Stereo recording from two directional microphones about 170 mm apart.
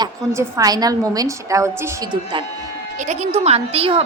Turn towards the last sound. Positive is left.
turn(degrees=-35)  # may be behind; listen again after turning